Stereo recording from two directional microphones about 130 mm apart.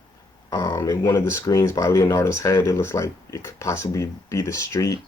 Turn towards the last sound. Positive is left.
turn(degrees=25)  # may be behind; listen again after turning